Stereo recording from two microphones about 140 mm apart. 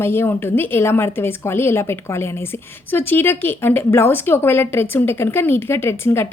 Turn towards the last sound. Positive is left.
turn(degrees=15)  # may be behind; listen again after turning